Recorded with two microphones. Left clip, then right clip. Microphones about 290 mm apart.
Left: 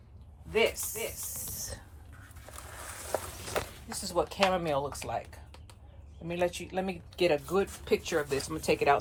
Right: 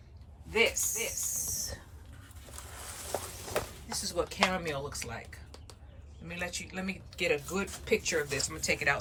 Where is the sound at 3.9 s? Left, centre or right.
Centre.